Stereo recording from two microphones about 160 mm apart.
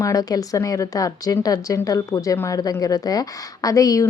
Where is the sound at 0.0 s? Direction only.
20° left (ahead or behind).